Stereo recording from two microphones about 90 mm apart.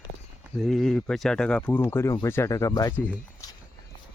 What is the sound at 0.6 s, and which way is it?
Speech, centre (ahead or behind).